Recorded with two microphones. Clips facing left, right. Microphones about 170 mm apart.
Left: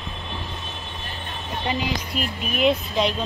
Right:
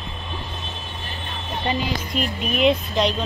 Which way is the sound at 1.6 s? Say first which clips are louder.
Right 1 dB; 5° left (ahead or behind).